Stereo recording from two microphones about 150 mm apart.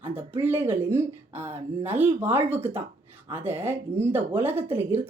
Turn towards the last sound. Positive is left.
turn(degrees=-15)  # may be behind; listen again after turning